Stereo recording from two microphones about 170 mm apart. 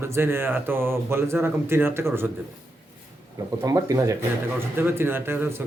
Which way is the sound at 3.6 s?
20° right (ahead or behind).